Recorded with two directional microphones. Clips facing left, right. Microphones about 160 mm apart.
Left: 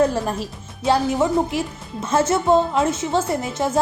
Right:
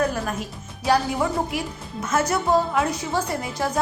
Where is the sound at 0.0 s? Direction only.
30° left (ahead or behind).